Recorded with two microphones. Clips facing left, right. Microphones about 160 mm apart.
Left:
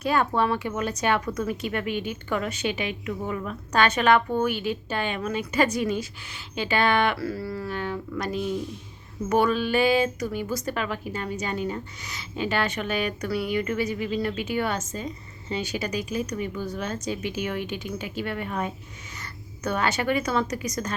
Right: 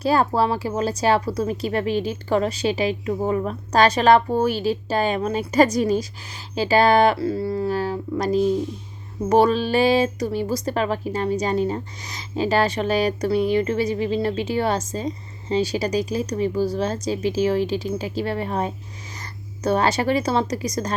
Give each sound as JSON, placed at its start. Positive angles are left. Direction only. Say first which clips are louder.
{"t": 0.0, "sound": "speech", "louder": "right 4 dB", "side_deg": -35}
{"t": 7.2, "sound": "speech", "louder": "right 7 dB", "side_deg": -25}